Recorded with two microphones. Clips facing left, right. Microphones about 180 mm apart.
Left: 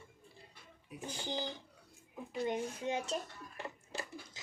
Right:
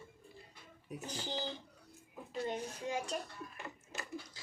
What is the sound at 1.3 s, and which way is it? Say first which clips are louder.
Speech: left 2 dB; 15° left (ahead or behind).